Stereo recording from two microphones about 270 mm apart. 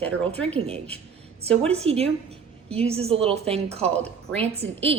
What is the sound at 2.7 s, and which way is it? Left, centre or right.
A woman's voice, right.